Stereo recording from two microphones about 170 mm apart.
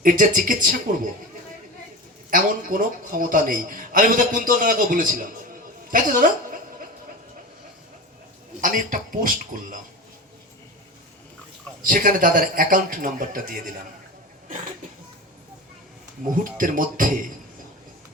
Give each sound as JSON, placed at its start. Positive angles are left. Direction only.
{"t": 0.0, "sound": "speech", "side_deg": -50}
{"t": 2.3, "sound": "a man's voice", "side_deg": -55}
{"t": 5.9, "sound": "chuckle", "side_deg": -50}
{"t": 8.6, "sound": "speech", "side_deg": -55}
{"t": 11.8, "sound": "speech", "side_deg": -55}
{"t": 16.4, "sound": "speech", "side_deg": -55}